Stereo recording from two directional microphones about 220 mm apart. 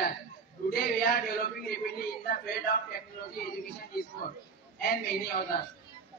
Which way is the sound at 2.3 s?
45° left (ahead or behind).